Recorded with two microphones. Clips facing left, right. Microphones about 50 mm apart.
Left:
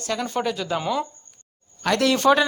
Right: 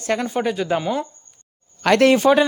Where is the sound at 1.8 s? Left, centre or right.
Right.